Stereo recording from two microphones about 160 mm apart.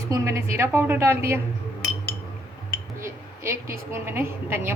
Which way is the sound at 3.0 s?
15° right (ahead or behind).